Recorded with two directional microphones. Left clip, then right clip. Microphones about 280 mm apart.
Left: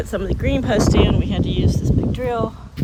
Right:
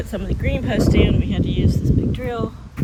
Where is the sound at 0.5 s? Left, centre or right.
Centre.